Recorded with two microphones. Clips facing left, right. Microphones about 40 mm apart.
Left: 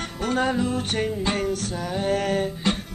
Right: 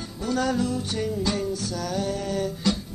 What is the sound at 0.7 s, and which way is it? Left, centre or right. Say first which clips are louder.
Music: left 2 dB; left.